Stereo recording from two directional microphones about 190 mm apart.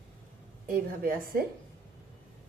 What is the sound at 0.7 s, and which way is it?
Speech, 50° right (ahead or behind).